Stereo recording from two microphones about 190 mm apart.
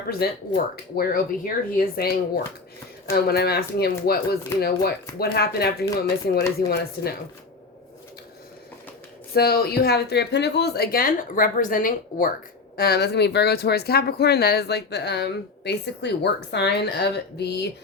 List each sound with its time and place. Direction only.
0.1 s speech: 55° left (ahead or behind)
9.3 s speech: 55° left (ahead or behind)